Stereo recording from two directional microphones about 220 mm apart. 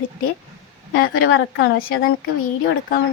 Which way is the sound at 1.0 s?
70° left (ahead or behind).